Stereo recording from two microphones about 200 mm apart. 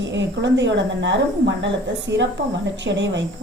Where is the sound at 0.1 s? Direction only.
60° right (ahead or behind).